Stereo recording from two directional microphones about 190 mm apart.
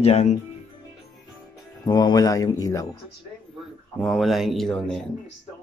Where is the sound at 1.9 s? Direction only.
20° left (ahead or behind).